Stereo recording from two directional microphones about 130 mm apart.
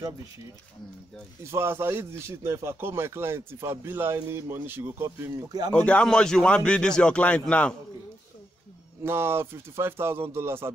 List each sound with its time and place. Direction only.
1.4 s speech: 20° right (ahead or behind)
5.7 s a man's voice: 10° left (ahead or behind)
9.0 s speech: 20° right (ahead or behind)